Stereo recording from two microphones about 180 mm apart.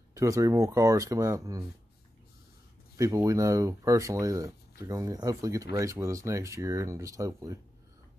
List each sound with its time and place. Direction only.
0.1 s speech: 15° right (ahead or behind)
3.0 s speech: 15° right (ahead or behind)